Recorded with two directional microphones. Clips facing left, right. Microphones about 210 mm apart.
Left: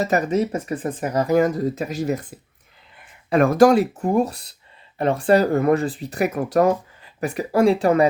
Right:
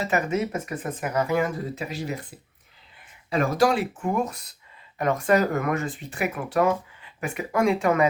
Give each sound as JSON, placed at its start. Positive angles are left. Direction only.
{"t": 0.0, "sound": "speech", "side_deg": 35}
{"t": 3.2, "sound": "speech", "side_deg": 55}